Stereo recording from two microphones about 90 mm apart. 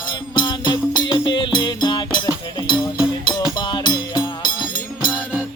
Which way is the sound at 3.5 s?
55° left (ahead or behind).